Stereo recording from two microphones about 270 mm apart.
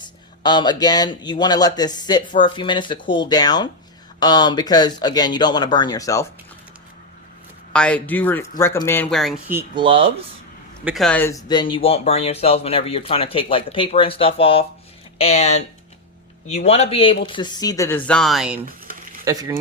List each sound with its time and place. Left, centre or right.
0.0 s speech: centre
7.7 s speech: centre
10.8 s speech: centre
19.2 s speech: centre